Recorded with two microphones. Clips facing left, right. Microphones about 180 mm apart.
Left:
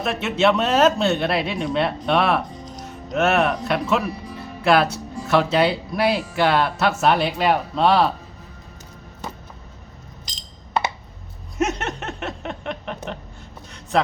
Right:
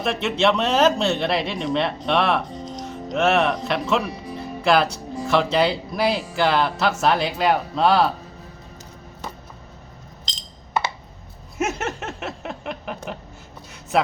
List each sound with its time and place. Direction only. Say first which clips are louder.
0.0 s speech: left 1 dB; 5° left (ahead or behind)
11.5 s a sound: left 2 dB; centre (ahead or behind)
13.9 s speech: even; 5° right (ahead or behind)